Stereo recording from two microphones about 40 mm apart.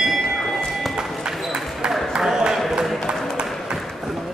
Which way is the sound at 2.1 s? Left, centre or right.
Centre.